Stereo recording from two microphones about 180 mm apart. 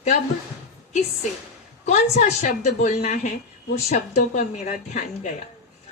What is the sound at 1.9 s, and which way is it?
Speech, 40° left (ahead or behind).